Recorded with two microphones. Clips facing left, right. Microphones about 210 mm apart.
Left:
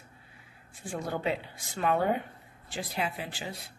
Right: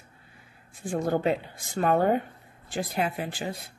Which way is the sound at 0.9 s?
45° right (ahead or behind).